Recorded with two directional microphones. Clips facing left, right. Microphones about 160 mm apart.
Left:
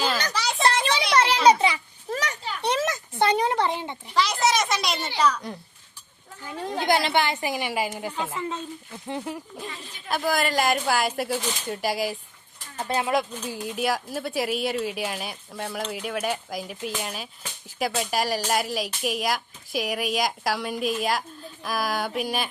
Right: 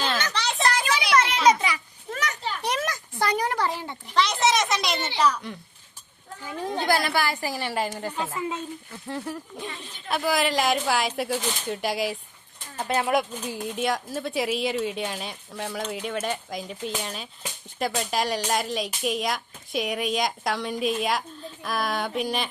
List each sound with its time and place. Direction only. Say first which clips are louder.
0.6 s a sound: left 2 dB; 30° left (ahead or behind)
4.1 s a sound: even; centre (ahead or behind)
6.4 s speech: right 1 dB; centre (ahead or behind)
6.7 s a woman's voice: left 2 dB; 20° left (ahead or behind)
8.4 s speech: right 2 dB; 10° right (ahead or behind)
9.0 s a woman's voice: left 1 dB; 15° left (ahead or behind)
9.8 s speech: even; centre (ahead or behind)